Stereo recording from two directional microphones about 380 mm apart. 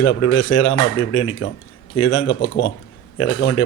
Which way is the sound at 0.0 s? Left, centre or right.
Left.